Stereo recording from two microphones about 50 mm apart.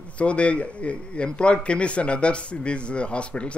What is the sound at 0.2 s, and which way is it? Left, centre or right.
A man's voice, left.